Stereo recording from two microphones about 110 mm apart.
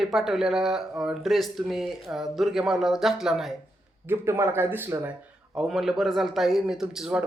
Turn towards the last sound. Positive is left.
turn(degrees=-5)  # may be behind; listen again after turning